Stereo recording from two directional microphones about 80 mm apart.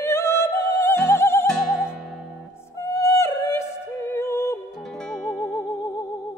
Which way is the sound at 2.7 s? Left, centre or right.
Left.